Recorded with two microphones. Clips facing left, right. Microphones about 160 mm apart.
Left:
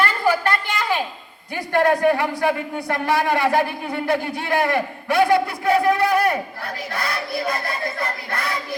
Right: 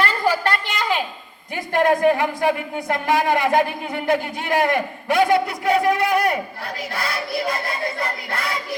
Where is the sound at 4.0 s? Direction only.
15° right (ahead or behind).